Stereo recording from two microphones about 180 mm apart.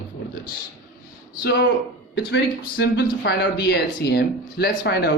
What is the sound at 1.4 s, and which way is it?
Speech, 65° left (ahead or behind).